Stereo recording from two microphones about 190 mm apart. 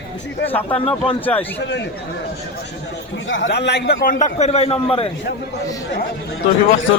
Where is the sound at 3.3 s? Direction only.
75° left (ahead or behind); by 5.1 s 30° left (ahead or behind).